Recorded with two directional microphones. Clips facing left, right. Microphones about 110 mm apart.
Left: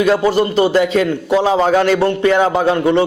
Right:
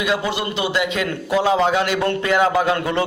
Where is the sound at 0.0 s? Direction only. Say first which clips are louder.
Left 8 dB; 40° left (ahead or behind).